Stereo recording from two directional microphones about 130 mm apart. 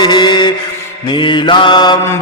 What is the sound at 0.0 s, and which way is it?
Mantra, 35° left (ahead or behind).